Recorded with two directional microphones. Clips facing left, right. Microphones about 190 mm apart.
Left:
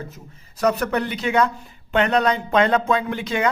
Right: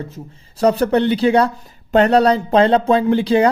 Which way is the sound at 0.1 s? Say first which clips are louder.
Right 9 dB; 30° right (ahead or behind).